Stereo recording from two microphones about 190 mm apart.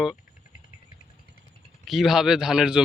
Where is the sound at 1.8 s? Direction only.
Centre (ahead or behind).